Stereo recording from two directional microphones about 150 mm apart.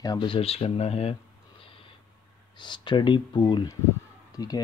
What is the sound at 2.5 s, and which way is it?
Speech, 30° left (ahead or behind).